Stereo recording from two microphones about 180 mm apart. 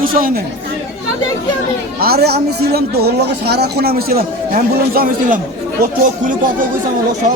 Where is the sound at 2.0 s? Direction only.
60° right (ahead or behind).